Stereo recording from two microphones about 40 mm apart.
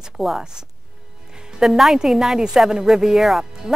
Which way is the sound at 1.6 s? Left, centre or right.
Centre.